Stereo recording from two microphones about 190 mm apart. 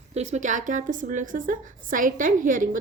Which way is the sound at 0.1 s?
35° right (ahead or behind).